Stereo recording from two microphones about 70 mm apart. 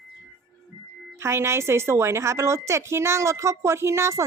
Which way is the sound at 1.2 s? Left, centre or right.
Right.